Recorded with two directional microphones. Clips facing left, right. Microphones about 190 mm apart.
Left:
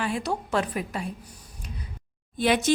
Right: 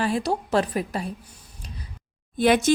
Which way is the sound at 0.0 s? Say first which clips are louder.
Right 4 dB; 35° right (ahead or behind).